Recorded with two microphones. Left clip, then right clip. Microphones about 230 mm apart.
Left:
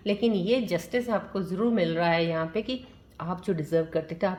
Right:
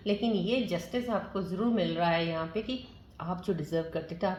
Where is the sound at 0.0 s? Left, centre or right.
Left.